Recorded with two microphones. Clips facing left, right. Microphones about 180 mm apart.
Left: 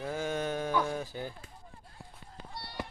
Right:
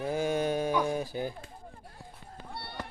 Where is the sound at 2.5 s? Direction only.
60° right (ahead or behind).